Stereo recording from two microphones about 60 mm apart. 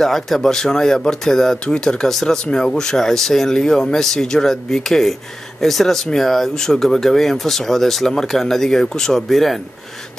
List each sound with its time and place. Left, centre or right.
0.0 s speech: centre